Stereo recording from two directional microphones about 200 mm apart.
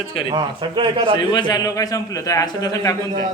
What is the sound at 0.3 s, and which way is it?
Speech, 25° right (ahead or behind).